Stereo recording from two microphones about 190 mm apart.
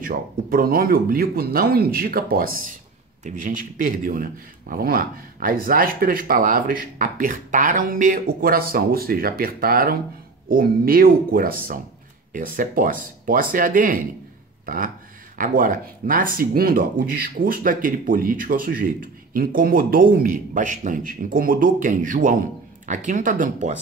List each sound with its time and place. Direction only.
0.0 s speech: 50° right (ahead or behind)
15.3 s speech: 45° right (ahead or behind)